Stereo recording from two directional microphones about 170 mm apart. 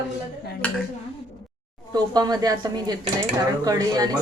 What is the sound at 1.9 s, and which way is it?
Speech, 25° right (ahead or behind).